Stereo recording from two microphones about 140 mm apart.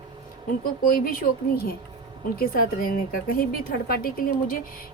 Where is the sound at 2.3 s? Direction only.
90° left.